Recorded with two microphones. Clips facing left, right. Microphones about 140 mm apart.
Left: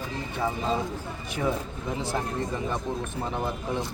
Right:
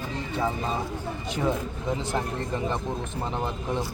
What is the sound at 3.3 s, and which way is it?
Speech, 20° right (ahead or behind).